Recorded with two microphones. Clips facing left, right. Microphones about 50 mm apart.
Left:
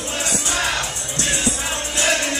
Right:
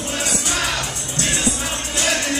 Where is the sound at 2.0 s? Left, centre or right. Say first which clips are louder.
Left 1 dB; left.